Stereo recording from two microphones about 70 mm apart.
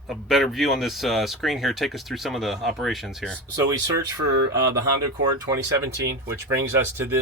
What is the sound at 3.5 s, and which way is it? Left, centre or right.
Speech, right.